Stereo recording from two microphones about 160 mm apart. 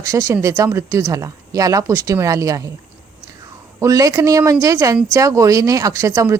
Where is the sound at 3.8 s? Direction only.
20° right (ahead or behind).